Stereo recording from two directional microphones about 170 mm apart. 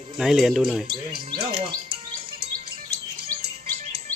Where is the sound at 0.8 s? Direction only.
30° right (ahead or behind).